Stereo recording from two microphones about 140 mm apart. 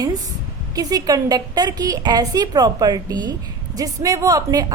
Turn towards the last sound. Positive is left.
turn(degrees=-25)  # may be behind; listen again after turning